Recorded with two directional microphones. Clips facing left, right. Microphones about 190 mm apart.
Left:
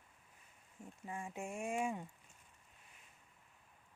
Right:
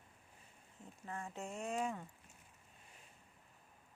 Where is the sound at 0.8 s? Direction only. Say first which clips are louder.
Left 1 dB; 10° left (ahead or behind).